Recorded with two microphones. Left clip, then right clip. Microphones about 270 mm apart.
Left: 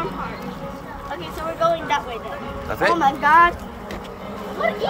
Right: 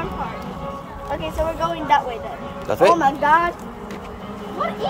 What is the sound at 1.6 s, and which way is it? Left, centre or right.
Speech, centre.